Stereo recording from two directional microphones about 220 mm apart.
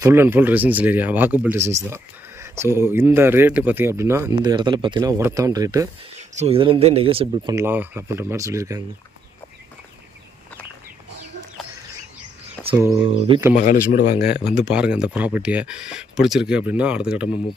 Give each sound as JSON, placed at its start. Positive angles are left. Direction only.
{"t": 0.0, "sound": "speech", "side_deg": -10}
{"t": 6.1, "sound": "speech", "side_deg": -30}
{"t": 7.5, "sound": "speech", "side_deg": -10}
{"t": 12.6, "sound": "speech", "side_deg": -15}
{"t": 13.6, "sound": "speech", "side_deg": 35}
{"t": 14.2, "sound": "speech", "side_deg": -5}